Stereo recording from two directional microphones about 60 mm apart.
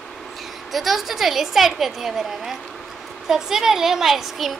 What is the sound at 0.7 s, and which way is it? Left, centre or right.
A child's voice, centre.